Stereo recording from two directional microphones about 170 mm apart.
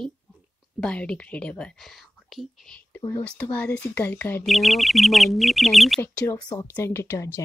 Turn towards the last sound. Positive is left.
turn(degrees=15)  # may be behind; listen again after turning